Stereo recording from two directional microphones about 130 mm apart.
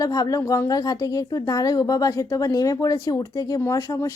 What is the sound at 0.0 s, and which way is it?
A woman's voice, 30° left (ahead or behind).